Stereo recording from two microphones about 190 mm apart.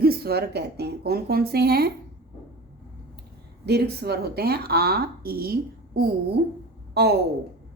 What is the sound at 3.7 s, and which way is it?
A woman's voice, 60° right (ahead or behind).